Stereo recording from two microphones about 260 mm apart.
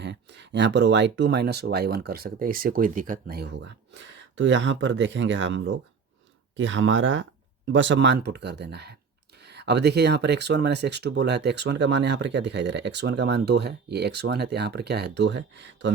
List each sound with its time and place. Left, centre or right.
0.0 s speech: right